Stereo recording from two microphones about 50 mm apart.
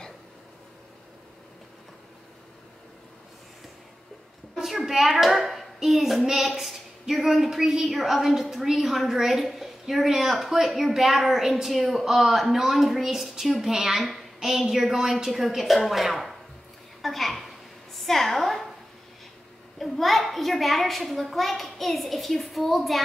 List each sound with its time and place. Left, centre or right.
4.6 s a child's voice: centre
17.9 s a sound: centre
19.8 s a child's voice: centre